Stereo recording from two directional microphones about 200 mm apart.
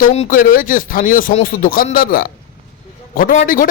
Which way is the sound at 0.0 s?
40° left (ahead or behind).